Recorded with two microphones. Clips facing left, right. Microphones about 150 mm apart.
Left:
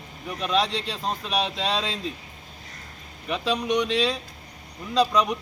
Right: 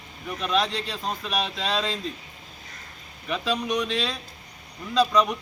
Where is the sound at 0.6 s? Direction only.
30° left (ahead or behind).